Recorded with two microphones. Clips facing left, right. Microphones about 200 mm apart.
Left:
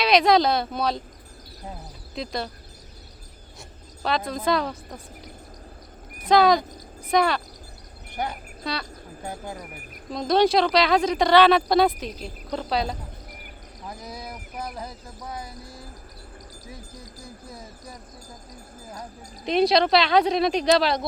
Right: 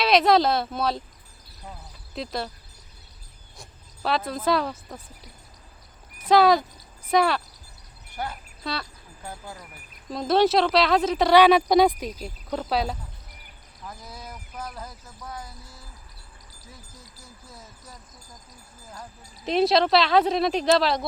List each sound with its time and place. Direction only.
0.0 s speech: centre (ahead or behind)
2.1 s speech: centre (ahead or behind)
4.0 s speech: 5° right (ahead or behind)
6.2 s speech: 5° right (ahead or behind)
8.1 s speech: 15° left (ahead or behind)
8.6 s speech: centre (ahead or behind)
10.1 s speech: 5° right (ahead or behind)
13.8 s speech: 15° left (ahead or behind)
16.6 s a sound: 15° left (ahead or behind)
19.5 s speech: centre (ahead or behind)